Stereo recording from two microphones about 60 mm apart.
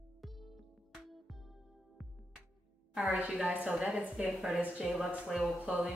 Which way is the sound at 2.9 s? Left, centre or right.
Centre.